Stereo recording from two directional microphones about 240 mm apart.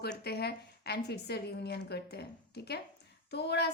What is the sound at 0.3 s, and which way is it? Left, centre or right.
A woman's voice, left.